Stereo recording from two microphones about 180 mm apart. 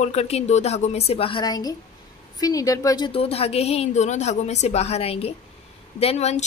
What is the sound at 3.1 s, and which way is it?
A woman's voice, 35° left (ahead or behind).